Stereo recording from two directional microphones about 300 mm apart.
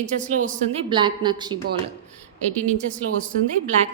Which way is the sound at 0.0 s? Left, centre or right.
Right.